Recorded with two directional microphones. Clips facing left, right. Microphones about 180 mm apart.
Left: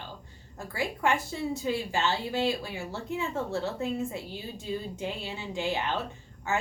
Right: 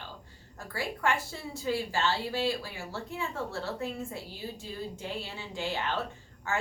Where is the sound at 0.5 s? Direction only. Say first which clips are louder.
Left 3 dB; 20° left (ahead or behind).